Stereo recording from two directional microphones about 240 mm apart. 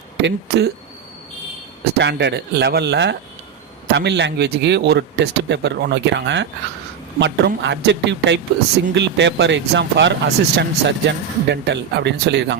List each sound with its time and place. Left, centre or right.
0.2 s speech: right
2.0 s speech: right